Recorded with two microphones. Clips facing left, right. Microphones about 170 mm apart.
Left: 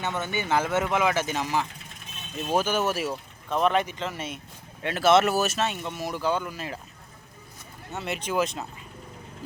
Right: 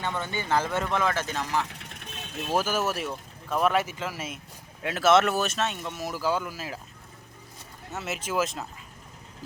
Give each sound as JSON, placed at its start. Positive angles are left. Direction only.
{"t": 0.2, "sound": "speech", "side_deg": 10}
{"t": 1.6, "sound": "vehicle", "side_deg": -70}
{"t": 2.6, "sound": "speech", "side_deg": 0}
{"t": 7.9, "sound": "speech", "side_deg": 0}